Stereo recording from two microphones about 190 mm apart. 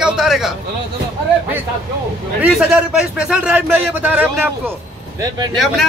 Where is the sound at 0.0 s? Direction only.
Centre (ahead or behind).